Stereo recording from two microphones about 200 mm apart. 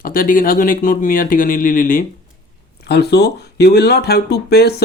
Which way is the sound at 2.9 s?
55° left (ahead or behind).